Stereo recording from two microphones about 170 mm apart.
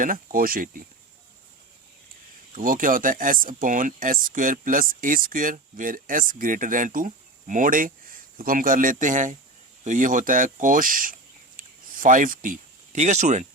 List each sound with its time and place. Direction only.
0.0 s speech: 55° right (ahead or behind)
2.6 s speech: 55° right (ahead or behind)